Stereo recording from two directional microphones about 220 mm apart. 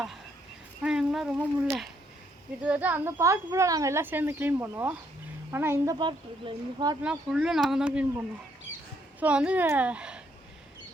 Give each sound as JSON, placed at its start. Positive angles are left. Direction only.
{"t": 0.8, "sound": "speech", "side_deg": -5}
{"t": 7.0, "sound": "speech", "side_deg": -5}
{"t": 9.2, "sound": "speech", "side_deg": -5}